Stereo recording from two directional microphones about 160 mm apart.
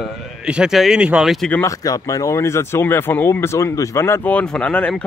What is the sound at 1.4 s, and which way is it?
Speech, 15° left (ahead or behind).